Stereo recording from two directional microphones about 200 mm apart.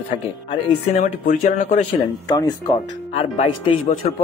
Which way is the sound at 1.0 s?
40° left (ahead or behind).